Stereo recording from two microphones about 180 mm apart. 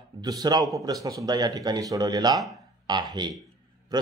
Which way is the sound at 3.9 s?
20° right (ahead or behind).